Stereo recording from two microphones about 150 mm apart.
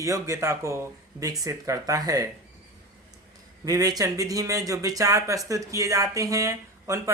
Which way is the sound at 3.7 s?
25° right (ahead or behind).